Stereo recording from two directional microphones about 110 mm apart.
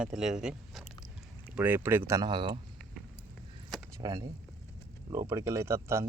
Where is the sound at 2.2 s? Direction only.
45° right (ahead or behind).